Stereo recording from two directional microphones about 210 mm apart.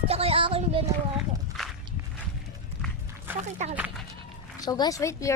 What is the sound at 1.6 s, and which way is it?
Walk, centre (ahead or behind).